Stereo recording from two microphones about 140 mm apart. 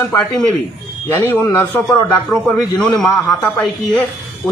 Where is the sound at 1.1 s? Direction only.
15° left (ahead or behind).